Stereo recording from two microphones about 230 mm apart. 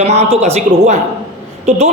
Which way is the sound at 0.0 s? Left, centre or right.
Right.